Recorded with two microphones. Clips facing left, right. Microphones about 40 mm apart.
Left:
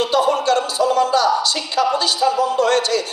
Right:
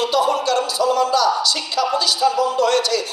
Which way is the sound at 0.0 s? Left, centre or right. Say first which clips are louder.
Left 1 dB; left.